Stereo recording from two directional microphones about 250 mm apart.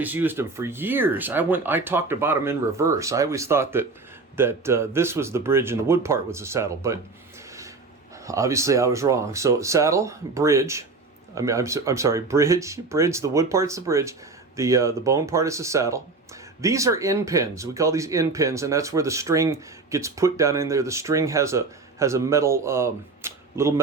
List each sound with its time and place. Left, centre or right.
0.0 s speech: centre
8.3 s speech: centre